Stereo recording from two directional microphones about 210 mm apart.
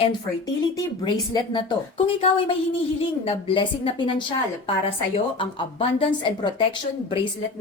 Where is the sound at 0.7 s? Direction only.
20° left (ahead or behind).